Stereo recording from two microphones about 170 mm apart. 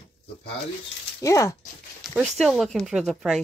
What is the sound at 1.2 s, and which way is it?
Speech, 20° left (ahead or behind).